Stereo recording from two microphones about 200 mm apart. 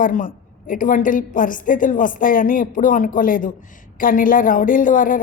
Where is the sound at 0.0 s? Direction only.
40° left (ahead or behind).